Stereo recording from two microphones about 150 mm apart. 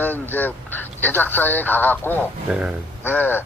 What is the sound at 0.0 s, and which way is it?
Speech, 10° left (ahead or behind).